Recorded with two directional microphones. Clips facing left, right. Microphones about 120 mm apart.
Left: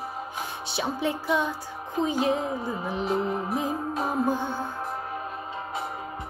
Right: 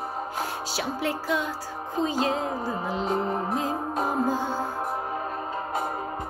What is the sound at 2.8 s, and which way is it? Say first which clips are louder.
Music: right 1 dB; 20° right (ahead or behind).